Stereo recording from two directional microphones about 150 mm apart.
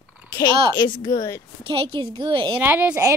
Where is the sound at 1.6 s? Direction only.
35° right (ahead or behind).